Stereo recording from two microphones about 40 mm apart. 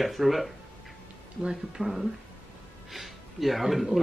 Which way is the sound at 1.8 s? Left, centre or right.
Centre.